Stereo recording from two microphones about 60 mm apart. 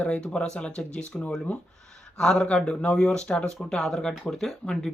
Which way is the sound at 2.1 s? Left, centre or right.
Centre.